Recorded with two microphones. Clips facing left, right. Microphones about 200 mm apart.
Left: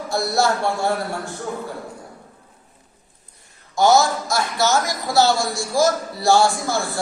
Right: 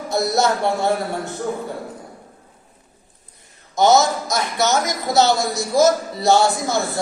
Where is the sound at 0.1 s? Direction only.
20° right (ahead or behind).